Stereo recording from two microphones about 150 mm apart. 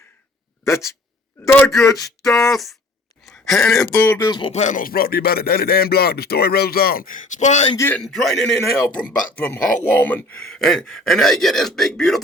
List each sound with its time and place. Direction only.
0.6 s speech: 20° left (ahead or behind)
1.8 s a sound: 20° left (ahead or behind)
2.2 s speech: centre (ahead or behind)
3.2 s a sound: centre (ahead or behind)
3.9 s speech: 10° left (ahead or behind)
4.2 s speech: 30° left (ahead or behind)
4.5 s speech: 55° left (ahead or behind)
7.8 s speech: 15° left (ahead or behind)
8.0 s speech: centre (ahead or behind)
8.8 s speech: 15° left (ahead or behind)